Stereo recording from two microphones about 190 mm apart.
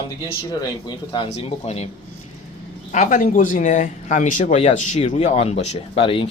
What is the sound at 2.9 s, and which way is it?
Speech, 40° left (ahead or behind).